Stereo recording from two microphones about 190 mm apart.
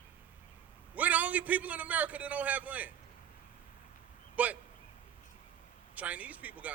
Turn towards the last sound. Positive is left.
turn(degrees=-10)  # may be behind; listen again after turning